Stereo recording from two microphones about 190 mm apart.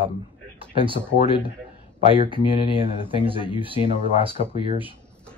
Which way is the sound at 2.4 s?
25° left (ahead or behind).